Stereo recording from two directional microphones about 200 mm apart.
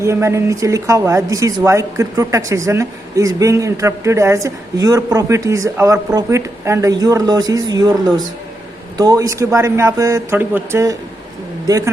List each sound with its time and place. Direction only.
0.0 s speech: 15° right (ahead or behind)